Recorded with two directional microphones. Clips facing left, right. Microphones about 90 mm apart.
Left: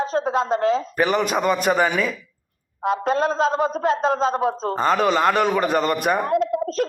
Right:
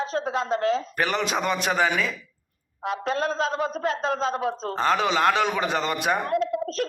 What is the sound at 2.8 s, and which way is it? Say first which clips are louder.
Speech: left 6 dB; 40° left (ahead or behind).